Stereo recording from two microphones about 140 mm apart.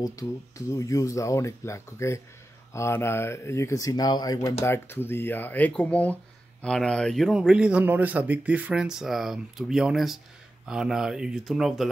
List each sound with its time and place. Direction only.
0.0 s speech: 25° left (ahead or behind); by 11.9 s centre (ahead or behind)